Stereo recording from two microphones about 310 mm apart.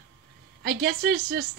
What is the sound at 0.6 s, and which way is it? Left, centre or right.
Speech, right.